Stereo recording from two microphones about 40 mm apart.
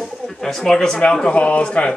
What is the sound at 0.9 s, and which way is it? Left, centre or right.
Speech, left.